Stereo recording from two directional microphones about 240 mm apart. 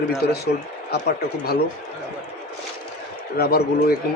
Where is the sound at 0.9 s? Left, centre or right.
Left.